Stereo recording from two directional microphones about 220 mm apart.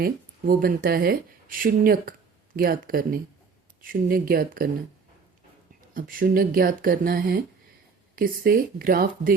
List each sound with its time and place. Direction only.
0.0 s speech: 40° right (ahead or behind)
5.9 s speech: 40° right (ahead or behind)